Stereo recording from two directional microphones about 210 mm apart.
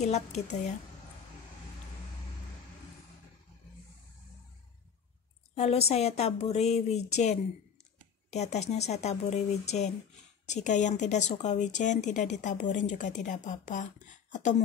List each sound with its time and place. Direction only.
0.0 s speech: 35° left (ahead or behind)
5.5 s speech: 30° left (ahead or behind)